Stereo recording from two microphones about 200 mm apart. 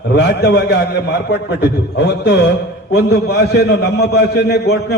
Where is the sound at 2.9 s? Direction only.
50° left (ahead or behind).